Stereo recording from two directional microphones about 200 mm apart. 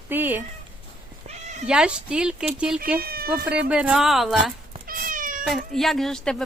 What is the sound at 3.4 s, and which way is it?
Speech, 5° right (ahead or behind).